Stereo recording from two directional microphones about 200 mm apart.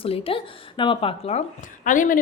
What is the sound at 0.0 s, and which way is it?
Speech, 25° left (ahead or behind).